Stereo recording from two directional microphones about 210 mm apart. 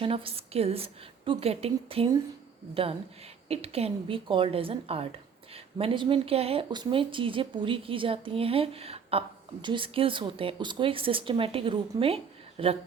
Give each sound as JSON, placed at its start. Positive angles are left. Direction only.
{"t": 0.0, "sound": "speech", "side_deg": -25}
{"t": 3.5, "sound": "speech", "side_deg": -30}